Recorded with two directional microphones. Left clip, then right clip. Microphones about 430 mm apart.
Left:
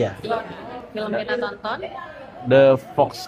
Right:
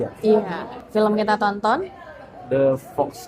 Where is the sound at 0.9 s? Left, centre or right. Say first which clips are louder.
Right 6 dB; right.